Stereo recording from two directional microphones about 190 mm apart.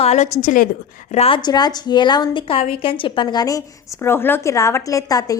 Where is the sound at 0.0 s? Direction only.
35° left (ahead or behind).